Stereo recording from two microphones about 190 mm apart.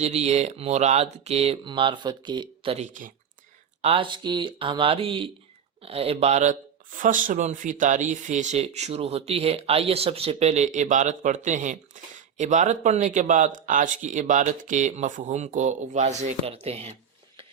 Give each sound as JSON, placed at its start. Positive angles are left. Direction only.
{"t": 0.0, "sound": "speech", "side_deg": -35}
{"t": 2.7, "sound": "speech", "side_deg": -40}
{"t": 3.8, "sound": "speech", "side_deg": -30}